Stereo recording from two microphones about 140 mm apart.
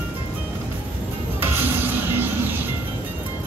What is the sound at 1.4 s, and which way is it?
Music, 15° right (ahead or behind).